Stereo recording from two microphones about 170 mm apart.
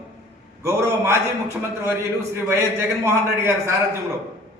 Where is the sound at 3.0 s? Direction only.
15° right (ahead or behind).